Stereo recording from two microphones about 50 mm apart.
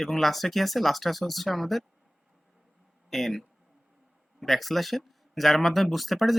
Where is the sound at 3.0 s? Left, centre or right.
Centre.